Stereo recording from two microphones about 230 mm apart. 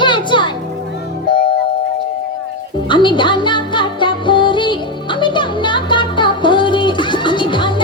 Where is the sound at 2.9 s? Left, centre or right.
Centre.